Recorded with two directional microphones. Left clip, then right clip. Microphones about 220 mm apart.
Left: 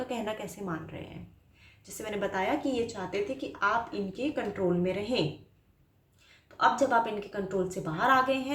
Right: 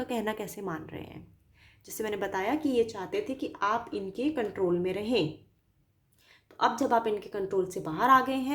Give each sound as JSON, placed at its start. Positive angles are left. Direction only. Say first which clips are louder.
{"t": 0.1, "sound": "a woman's voice", "louder": "right 2 dB", "side_deg": -45}
{"t": 6.6, "sound": "a woman's voice", "louder": "left 1 dB", "side_deg": -50}